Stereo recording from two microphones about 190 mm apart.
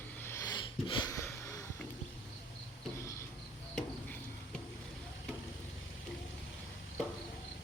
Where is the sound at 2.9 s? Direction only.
15° left (ahead or behind).